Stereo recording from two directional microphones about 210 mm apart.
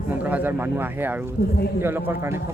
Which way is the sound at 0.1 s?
5° right (ahead or behind).